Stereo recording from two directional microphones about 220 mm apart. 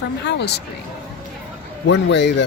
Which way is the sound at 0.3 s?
50° left (ahead or behind).